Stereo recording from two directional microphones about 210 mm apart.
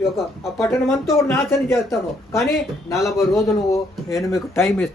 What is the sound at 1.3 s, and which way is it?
Speech, 10° left (ahead or behind).